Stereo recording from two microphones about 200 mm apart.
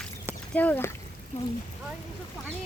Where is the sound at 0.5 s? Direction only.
10° left (ahead or behind).